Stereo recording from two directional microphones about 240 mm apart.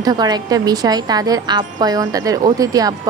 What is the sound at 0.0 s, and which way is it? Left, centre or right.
A woman's voice, centre.